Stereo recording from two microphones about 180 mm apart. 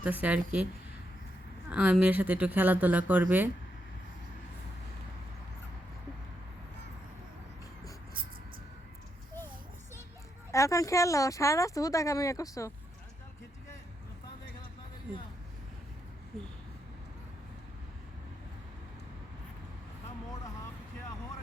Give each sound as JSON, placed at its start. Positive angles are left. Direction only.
{"t": 0.0, "sound": "speech", "side_deg": -10}
{"t": 1.7, "sound": "speech", "side_deg": -10}
{"t": 10.5, "sound": "speech", "side_deg": 15}